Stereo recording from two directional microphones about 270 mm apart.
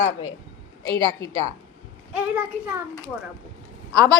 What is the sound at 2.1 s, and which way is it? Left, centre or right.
Speech, centre.